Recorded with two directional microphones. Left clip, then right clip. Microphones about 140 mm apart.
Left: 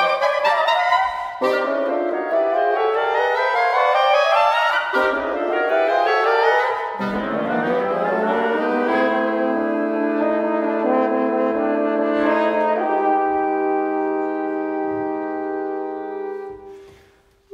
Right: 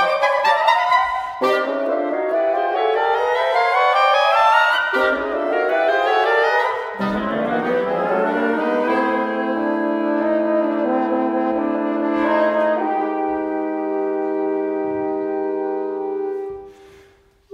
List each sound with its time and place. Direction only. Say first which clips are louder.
2.7 s music: right 1 dB; 20° right (ahead or behind)